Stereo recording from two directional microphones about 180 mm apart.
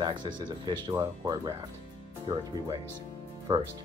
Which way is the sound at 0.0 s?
25° right (ahead or behind).